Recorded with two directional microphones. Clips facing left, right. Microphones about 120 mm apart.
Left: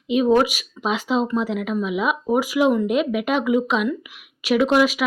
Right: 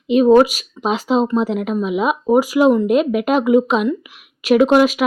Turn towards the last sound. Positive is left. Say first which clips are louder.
# right 5 dB
turn(degrees=-45)  # may be behind; listen again after turning